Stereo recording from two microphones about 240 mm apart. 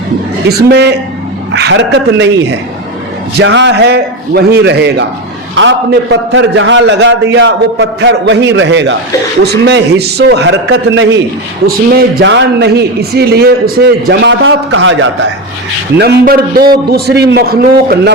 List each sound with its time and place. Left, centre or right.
0.4 s a man's voice: right
3.3 s a man's voice: right
11.6 s a man's voice: right